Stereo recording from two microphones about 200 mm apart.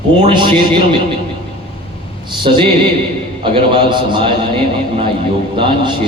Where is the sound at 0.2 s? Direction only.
25° right (ahead or behind).